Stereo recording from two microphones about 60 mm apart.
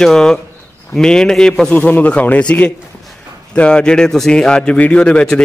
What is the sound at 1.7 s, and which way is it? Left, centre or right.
A man's voice, left.